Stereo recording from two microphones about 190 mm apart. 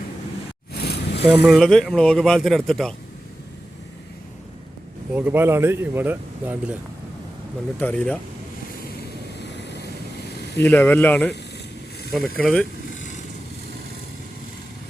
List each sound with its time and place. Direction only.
0.7 s vehicle: 60° left (ahead or behind)
1.3 s speech: 5° right (ahead or behind)
5.1 s speech: 10° right (ahead or behind)
7.8 s speech: 10° left (ahead or behind)
10.6 s speech: 10° left (ahead or behind)
12.4 s speech: 5° left (ahead or behind)